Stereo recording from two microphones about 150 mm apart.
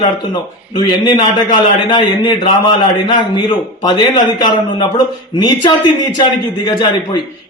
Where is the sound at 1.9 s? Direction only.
35° left (ahead or behind).